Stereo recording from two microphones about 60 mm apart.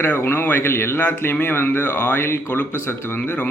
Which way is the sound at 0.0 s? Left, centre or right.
Left.